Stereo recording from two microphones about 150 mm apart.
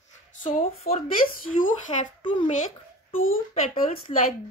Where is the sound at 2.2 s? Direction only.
35° left (ahead or behind).